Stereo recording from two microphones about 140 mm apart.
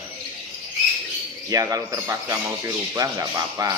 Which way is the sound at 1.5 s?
25° right (ahead or behind).